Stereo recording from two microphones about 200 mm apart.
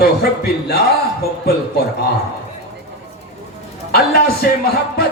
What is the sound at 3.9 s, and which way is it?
Music, 50° left (ahead or behind).